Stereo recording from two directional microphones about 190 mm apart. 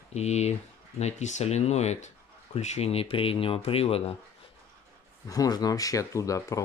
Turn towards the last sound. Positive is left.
turn(degrees=15)  # may be behind; listen again after turning